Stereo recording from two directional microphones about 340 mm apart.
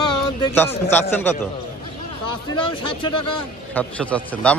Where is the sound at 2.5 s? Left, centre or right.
Centre.